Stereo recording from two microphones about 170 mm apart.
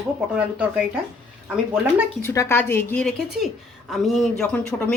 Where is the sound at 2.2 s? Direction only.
15° left (ahead or behind).